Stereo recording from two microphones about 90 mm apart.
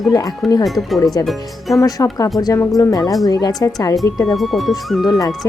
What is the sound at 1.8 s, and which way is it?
Speech, 40° left (ahead or behind).